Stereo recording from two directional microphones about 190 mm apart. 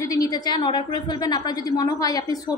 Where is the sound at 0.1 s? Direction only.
20° left (ahead or behind).